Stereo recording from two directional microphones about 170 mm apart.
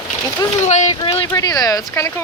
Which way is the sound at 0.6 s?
45° left (ahead or behind).